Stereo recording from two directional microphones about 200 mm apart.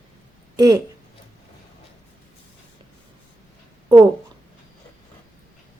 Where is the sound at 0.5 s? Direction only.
20° right (ahead or behind).